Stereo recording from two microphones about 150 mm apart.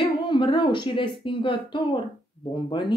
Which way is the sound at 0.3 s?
35° left (ahead or behind).